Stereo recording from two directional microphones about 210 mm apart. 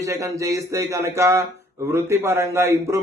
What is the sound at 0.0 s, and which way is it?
Speech, 15° right (ahead or behind).